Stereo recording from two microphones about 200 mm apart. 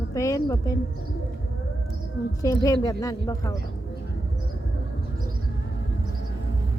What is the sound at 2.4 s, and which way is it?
A woman's voice, 15° left (ahead or behind).